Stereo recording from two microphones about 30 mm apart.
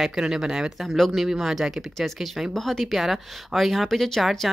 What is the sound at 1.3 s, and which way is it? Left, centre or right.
Speech, centre.